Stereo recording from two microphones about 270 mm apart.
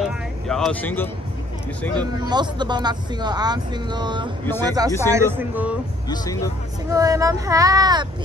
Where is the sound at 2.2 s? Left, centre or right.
Centre.